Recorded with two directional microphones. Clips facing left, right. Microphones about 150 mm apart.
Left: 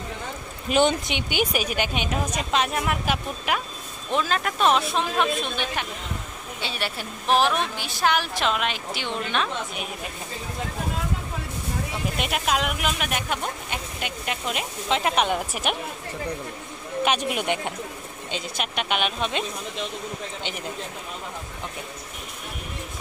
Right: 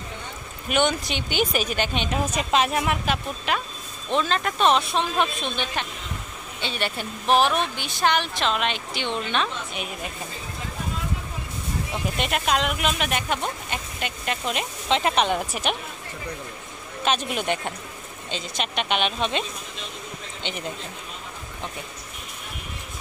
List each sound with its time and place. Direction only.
0.7 s speech: 30° left (ahead or behind)
1.1 s speech: 10° left (ahead or behind)
2.3 s a woman's voice: 5° right (ahead or behind)
3.1 s a woman's voice: 10° left (ahead or behind)
12.2 s a woman's voice: centre (ahead or behind)
17.0 s speech: 10° left (ahead or behind)